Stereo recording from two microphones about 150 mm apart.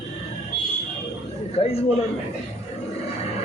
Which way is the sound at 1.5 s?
40° left (ahead or behind).